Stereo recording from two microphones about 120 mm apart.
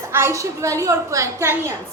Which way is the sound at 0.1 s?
20° right (ahead or behind).